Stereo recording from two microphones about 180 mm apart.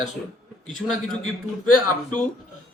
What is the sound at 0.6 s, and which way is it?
Speech, 5° left (ahead or behind).